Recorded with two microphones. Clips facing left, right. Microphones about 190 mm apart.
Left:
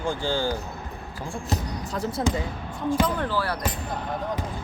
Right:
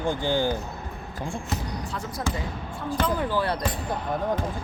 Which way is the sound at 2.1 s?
25° left (ahead or behind).